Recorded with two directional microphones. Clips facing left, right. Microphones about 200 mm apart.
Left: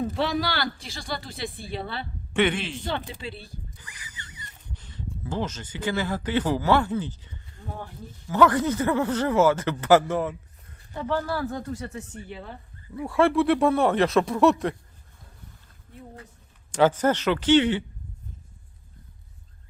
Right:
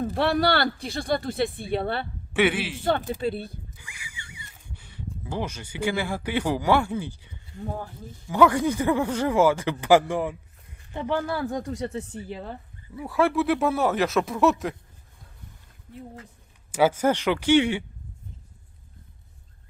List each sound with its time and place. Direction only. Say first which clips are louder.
0.1 s speech: right 4 dB; 60° right (ahead or behind)
2.3 s speech: right 1 dB; 10° right (ahead or behind)
2.8 s speech: right 7 dB; 50° right (ahead or behind)
3.8 s speech: right 1 dB; 10° right (ahead or behind)
11.9 s speech: right 4 dB; 35° right (ahead or behind)
13.0 s speech: left 2 dB; centre (ahead or behind)
16.7 s speech: even; 10° right (ahead or behind)